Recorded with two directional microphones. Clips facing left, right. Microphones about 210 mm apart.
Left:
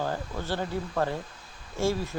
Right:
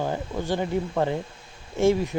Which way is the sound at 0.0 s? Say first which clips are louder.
Right 4 dB; 15° right (ahead or behind).